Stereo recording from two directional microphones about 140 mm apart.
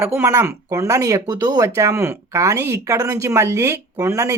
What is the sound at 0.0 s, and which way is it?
Speech, 15° right (ahead or behind).